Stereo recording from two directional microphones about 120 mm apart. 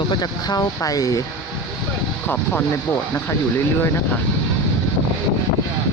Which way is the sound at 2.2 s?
15° left (ahead or behind).